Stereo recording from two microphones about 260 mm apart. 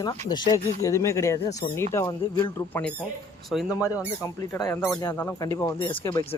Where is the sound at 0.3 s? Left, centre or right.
Centre.